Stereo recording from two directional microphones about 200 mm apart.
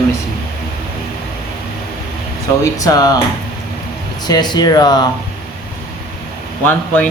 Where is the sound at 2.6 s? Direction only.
15° left (ahead or behind).